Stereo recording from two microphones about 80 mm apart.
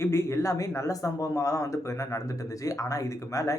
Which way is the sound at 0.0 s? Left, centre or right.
Left.